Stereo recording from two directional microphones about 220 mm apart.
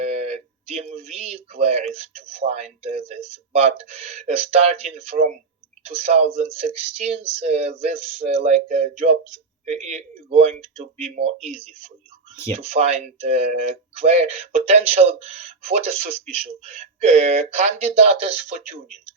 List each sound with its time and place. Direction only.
0.0 s speech: 30° right (ahead or behind)